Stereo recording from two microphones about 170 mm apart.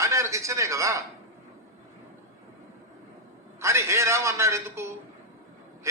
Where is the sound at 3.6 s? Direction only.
15° right (ahead or behind).